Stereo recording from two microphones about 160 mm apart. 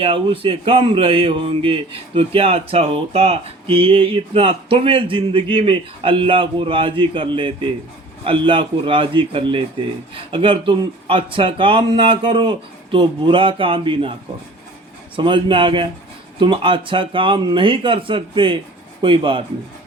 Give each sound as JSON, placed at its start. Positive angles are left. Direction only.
{"t": 0.0, "sound": "speech", "side_deg": -35}